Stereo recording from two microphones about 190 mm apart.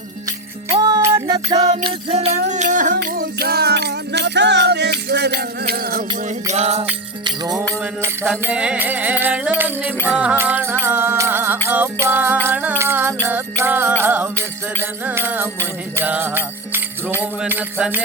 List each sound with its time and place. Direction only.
0.8 s music: 20° right (ahead or behind)
1.5 s music: 35° right (ahead or behind); by 6.1 s 50° right (ahead or behind)
6.2 s music: 35° right (ahead or behind)
8.3 s music: 10° right (ahead or behind)